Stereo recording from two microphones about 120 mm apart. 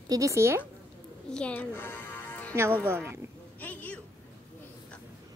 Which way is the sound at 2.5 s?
20° right (ahead or behind).